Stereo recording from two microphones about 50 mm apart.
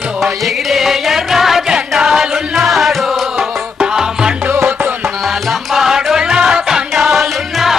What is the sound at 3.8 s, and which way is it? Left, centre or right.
Music, centre.